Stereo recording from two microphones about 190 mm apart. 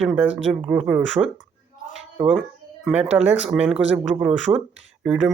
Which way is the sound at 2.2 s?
10° right (ahead or behind).